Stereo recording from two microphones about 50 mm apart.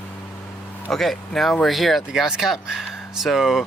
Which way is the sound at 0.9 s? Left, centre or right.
Centre.